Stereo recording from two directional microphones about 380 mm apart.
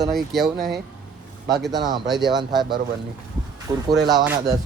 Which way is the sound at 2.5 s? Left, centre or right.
Centre.